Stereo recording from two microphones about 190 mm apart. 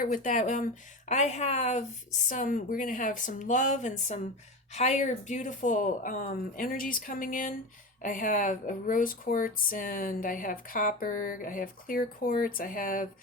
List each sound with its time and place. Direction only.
0.0 s speech: 45° left (ahead or behind)